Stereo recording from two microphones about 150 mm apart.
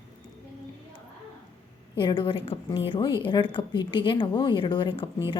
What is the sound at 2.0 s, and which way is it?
A woman's voice, 30° left (ahead or behind).